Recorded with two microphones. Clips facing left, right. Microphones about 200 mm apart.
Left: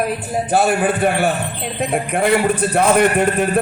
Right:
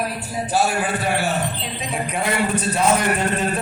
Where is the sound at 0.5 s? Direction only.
55° left (ahead or behind).